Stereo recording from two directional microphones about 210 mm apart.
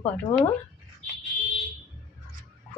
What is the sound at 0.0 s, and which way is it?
Speech, 10° left (ahead or behind).